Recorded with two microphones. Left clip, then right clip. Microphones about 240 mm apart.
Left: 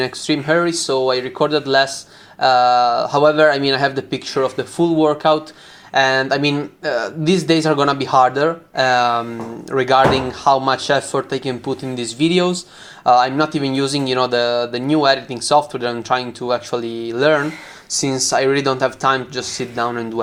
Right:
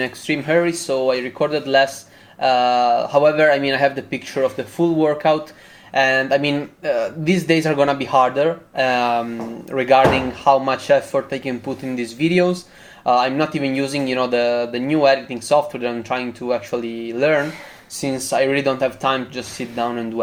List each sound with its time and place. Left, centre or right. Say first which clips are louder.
0.0 s speech: left 3 dB; centre